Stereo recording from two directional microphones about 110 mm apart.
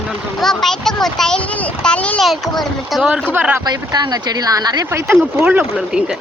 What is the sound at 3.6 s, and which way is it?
Speech, 40° right (ahead or behind).